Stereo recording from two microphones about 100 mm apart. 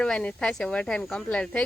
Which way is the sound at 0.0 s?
10° left (ahead or behind).